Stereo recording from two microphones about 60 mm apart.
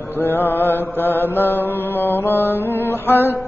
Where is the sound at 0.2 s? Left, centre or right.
Left.